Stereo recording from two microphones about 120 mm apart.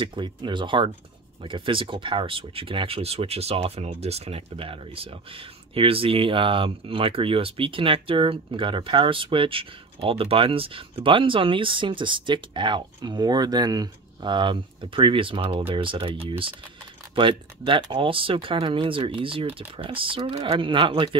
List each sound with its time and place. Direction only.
0.0 s speech: 40° right (ahead or behind)